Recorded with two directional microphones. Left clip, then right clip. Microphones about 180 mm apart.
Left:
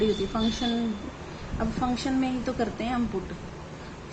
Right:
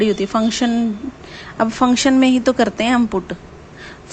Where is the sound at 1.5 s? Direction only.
65° right (ahead or behind).